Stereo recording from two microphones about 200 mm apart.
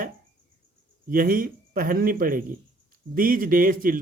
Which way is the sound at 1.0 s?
45° right (ahead or behind).